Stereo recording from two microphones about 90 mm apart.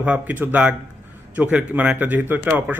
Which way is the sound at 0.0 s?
15° right (ahead or behind).